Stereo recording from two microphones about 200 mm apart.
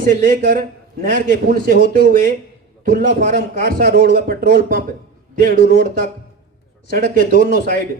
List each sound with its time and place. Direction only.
0.0 s a man's voice: 40° right (ahead or behind)